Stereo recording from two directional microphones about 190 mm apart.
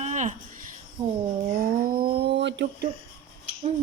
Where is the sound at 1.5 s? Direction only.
50° right (ahead or behind); by 2.6 s 65° right (ahead or behind).